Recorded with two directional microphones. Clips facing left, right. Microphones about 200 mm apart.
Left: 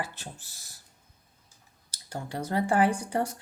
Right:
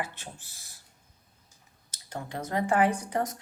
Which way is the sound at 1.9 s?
35° left (ahead or behind).